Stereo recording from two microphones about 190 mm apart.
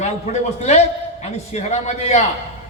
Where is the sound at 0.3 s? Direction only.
35° left (ahead or behind).